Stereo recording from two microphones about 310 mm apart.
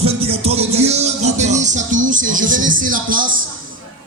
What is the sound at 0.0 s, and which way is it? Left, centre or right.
Music, centre.